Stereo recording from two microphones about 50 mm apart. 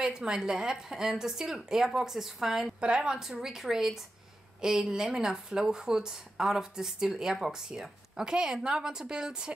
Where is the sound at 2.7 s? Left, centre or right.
Centre.